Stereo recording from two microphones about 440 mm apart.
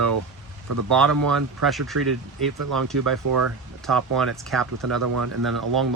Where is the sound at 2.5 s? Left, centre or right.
Right.